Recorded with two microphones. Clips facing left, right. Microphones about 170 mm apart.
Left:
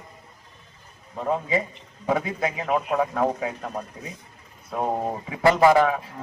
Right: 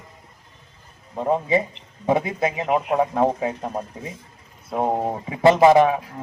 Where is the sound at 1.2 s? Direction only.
25° right (ahead or behind).